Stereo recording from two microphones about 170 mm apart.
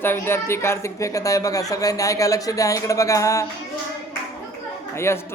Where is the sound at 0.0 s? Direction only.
15° left (ahead or behind).